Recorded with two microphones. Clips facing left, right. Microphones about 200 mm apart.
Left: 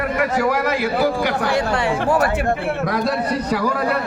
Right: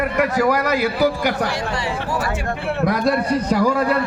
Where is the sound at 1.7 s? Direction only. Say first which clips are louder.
Left 5 dB; 55° left (ahead or behind).